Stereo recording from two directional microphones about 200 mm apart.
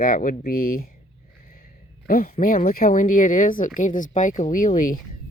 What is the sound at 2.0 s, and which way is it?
Speech, 45° left (ahead or behind).